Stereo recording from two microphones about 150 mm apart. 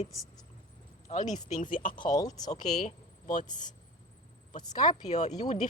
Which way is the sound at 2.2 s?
25° left (ahead or behind).